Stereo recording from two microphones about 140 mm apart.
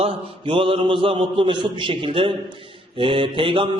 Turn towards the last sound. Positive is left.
turn(degrees=-40)  # may be behind; listen again after turning